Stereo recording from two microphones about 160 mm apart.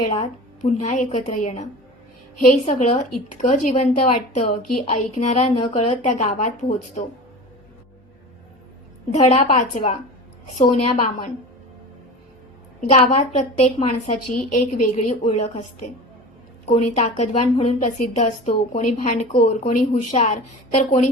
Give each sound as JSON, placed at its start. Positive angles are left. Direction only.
{"t": 0.1, "sound": "a woman's voice", "side_deg": 45}
{"t": 2.6, "sound": "a woman's voice", "side_deg": 45}
{"t": 9.1, "sound": "a woman's voice", "side_deg": 35}
{"t": 12.9, "sound": "a woman's voice", "side_deg": 40}
{"t": 15.2, "sound": "a woman's voice", "side_deg": 35}
{"t": 16.6, "sound": "a woman's voice", "side_deg": 45}